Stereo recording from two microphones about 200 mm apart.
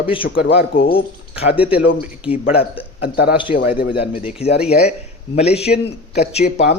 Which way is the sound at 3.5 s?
50° left (ahead or behind).